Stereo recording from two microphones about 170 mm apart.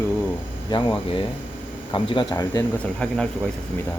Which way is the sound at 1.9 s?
30° left (ahead or behind).